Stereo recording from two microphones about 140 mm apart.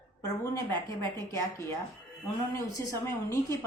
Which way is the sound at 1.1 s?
25° left (ahead or behind).